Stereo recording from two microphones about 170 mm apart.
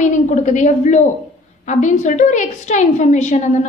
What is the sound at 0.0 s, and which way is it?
A woman's voice, 45° left (ahead or behind).